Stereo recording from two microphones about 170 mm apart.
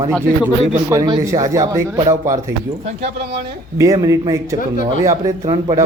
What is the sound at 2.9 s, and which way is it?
Speech, 40° right (ahead or behind).